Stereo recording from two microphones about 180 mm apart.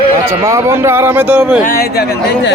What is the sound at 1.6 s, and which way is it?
Speech, 55° left (ahead or behind).